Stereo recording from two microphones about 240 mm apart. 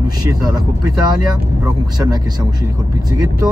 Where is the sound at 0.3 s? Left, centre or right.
Centre.